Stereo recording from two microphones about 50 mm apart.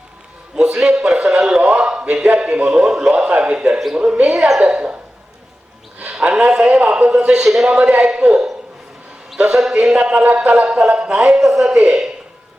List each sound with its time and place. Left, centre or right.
0.6 s a man's voice: centre
6.1 s a man's voice: centre
7.7 s speech: right
9.7 s speech: centre
11.3 s a man's voice: centre